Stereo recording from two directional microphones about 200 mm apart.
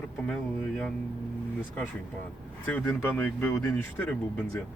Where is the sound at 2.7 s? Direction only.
5° left (ahead or behind).